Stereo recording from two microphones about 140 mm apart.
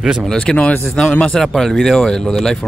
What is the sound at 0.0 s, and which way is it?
Speech, centre (ahead or behind).